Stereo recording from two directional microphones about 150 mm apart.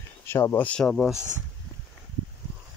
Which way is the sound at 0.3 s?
15° left (ahead or behind).